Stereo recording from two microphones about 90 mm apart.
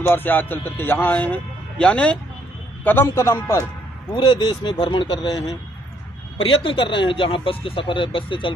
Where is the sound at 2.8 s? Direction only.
25° left (ahead or behind).